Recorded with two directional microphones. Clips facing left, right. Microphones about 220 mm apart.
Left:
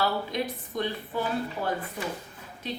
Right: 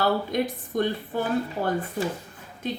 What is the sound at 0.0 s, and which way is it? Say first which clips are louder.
A woman's voice: right 4 dB; 50° right (ahead or behind).